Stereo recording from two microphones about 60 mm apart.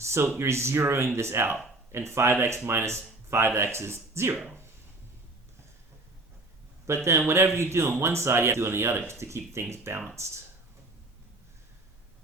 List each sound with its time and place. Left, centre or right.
0.0 s speech: right
6.8 s speech: right